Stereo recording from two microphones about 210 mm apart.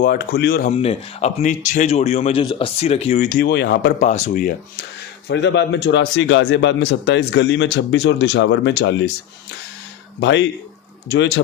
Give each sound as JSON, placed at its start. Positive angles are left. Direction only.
{"t": 0.0, "sound": "speech", "side_deg": 45}
{"t": 0.7, "sound": "speech", "side_deg": 30}
{"t": 4.0, "sound": "speech", "side_deg": 35}
{"t": 5.3, "sound": "speech", "side_deg": 55}
{"t": 10.2, "sound": "speech", "side_deg": 60}